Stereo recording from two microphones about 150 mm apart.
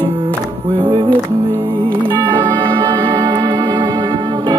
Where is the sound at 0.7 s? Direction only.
35° right (ahead or behind).